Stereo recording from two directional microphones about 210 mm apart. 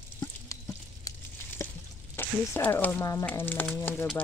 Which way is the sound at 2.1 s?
10° left (ahead or behind).